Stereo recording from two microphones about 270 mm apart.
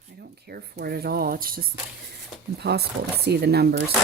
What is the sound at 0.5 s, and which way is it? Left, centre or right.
Speech, right.